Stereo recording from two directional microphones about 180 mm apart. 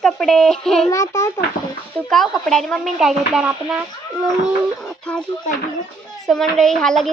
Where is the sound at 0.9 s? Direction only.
15° left (ahead or behind).